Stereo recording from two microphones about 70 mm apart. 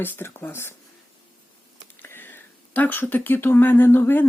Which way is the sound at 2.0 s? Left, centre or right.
Left.